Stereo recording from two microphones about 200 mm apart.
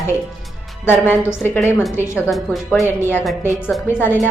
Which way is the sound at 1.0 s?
10° left (ahead or behind).